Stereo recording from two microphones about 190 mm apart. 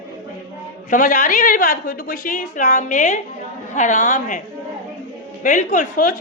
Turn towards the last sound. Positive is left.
turn(degrees=45)  # may be behind; listen again after turning